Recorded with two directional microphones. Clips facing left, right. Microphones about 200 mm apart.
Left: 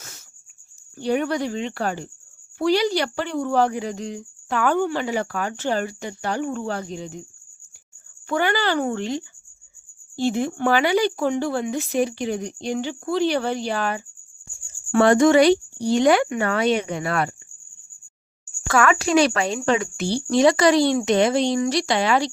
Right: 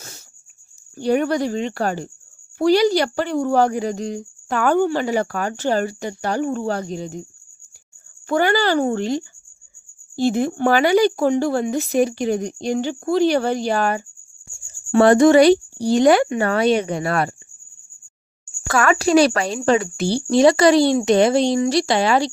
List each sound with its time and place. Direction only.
0.9 s speech: 40° right (ahead or behind)
8.3 s speech: 40° right (ahead or behind)
18.7 s speech: 35° right (ahead or behind)